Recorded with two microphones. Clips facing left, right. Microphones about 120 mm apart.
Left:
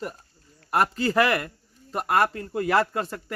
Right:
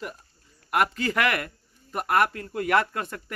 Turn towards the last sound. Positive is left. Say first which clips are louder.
# left 1 dB
turn(degrees=25)  # may be behind; listen again after turning